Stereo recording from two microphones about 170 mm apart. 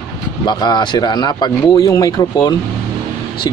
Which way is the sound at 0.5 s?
25° left (ahead or behind).